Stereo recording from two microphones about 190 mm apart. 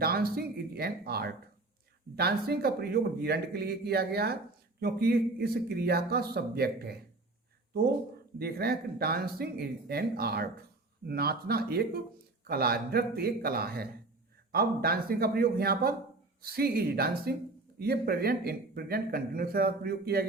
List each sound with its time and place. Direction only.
0.0 s speech: 55° right (ahead or behind)
8.4 s speech: 55° right (ahead or behind)